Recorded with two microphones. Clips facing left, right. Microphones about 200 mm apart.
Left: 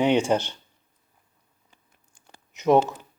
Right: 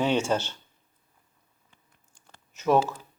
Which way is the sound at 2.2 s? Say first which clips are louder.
Left 4 dB; 15° left (ahead or behind).